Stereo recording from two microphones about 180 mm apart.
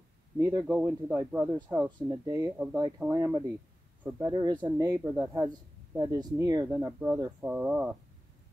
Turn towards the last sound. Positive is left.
turn(degrees=-10)  # may be behind; listen again after turning